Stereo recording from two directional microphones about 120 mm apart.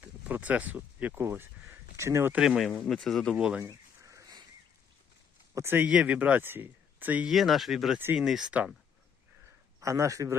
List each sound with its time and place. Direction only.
0.0 s a man's voice: 15° right (ahead or behind)
2.3 s speech: 5° right (ahead or behind)
3.3 s speech: 10° right (ahead or behind)
3.7 s a sound: 25° right (ahead or behind)
5.5 s speech: 20° right (ahead or behind); by 7.9 s centre (ahead or behind)
7.9 s speech: 15° right (ahead or behind)
9.8 s a man's voice: 25° right (ahead or behind)